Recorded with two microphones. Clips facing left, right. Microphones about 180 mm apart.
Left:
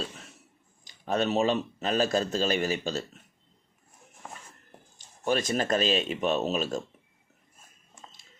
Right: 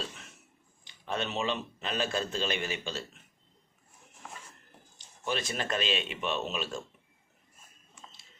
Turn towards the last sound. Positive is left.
turn(degrees=40)  # may be behind; listen again after turning